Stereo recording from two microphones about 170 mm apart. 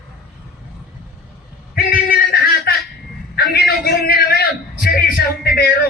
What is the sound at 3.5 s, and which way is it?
A man's voice, 65° left (ahead or behind).